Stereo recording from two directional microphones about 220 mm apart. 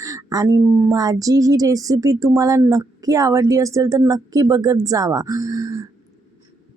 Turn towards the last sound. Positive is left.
turn(degrees=-15)  # may be behind; listen again after turning